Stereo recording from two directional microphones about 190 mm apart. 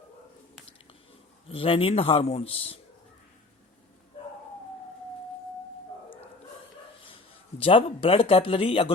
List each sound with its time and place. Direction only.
1.5 s a man's voice: 30° left (ahead or behind)
7.6 s speech: 30° left (ahead or behind)